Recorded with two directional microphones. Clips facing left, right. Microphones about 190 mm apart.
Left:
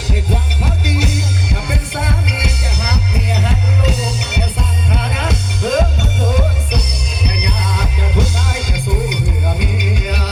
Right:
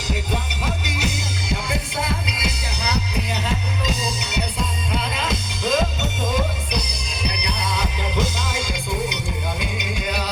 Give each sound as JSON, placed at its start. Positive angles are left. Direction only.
{"t": 1.7, "sound": "music", "side_deg": 60}
{"t": 9.6, "sound": "music", "side_deg": 65}